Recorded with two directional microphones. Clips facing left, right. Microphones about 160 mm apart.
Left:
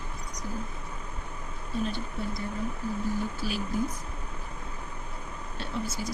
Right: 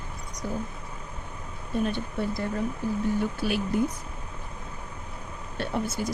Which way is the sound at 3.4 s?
60° right (ahead or behind).